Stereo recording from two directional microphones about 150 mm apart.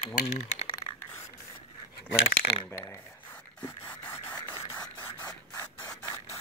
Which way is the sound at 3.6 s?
10° left (ahead or behind).